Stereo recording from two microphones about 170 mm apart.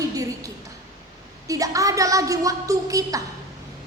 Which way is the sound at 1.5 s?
20° right (ahead or behind).